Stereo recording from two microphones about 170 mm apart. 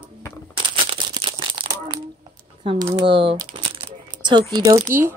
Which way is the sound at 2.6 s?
30° right (ahead or behind).